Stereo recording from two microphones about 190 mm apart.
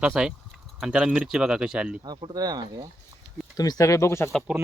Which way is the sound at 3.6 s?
20° left (ahead or behind).